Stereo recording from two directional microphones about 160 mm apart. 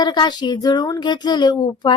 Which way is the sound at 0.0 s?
25° left (ahead or behind).